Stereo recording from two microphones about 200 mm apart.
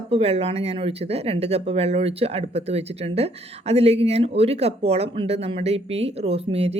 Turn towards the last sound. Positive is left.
turn(degrees=-30)  # may be behind; listen again after turning